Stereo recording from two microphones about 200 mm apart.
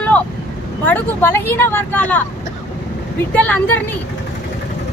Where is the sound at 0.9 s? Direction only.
10° left (ahead or behind).